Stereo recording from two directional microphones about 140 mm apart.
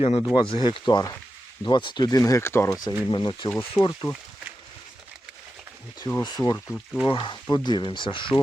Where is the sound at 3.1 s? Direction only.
35° left (ahead or behind).